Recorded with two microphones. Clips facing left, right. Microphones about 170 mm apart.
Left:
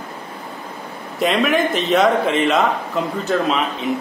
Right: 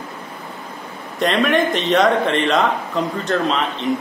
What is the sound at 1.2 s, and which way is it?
A man's voice, 5° left (ahead or behind).